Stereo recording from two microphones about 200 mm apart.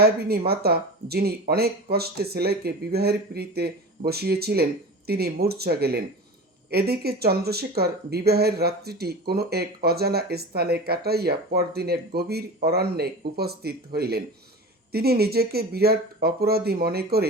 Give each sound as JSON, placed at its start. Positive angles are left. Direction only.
{"t": 0.0, "sound": "speech", "side_deg": -50}